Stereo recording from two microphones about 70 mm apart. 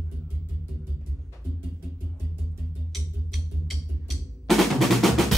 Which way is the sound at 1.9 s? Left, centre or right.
Right.